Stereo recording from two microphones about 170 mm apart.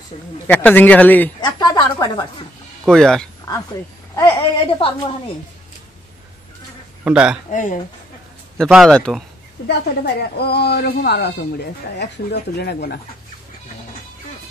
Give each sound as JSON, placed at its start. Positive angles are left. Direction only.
{"t": 0.5, "sound": "a man's voice", "side_deg": 10}
{"t": 1.4, "sound": "a sound", "side_deg": 25}
{"t": 2.8, "sound": "speech", "side_deg": 5}
{"t": 4.1, "sound": "speech", "side_deg": 30}
{"t": 7.1, "sound": "a man's voice", "side_deg": -5}
{"t": 7.5, "sound": "speech", "side_deg": 50}
{"t": 8.7, "sound": "speech", "side_deg": 5}
{"t": 9.7, "sound": "speech", "side_deg": 70}